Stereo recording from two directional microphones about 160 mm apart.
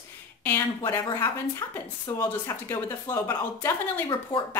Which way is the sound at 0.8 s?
25° left (ahead or behind).